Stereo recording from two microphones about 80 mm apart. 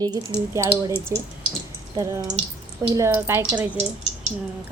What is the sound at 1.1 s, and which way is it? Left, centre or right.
Speech, right.